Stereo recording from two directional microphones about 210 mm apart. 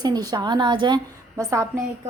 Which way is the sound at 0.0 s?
20° right (ahead or behind).